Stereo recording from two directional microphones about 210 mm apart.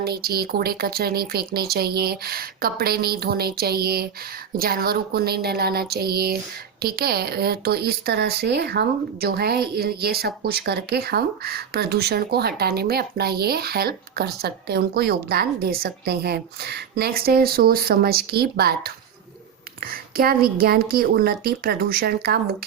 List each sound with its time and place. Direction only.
0.0 s speech: 50° right (ahead or behind)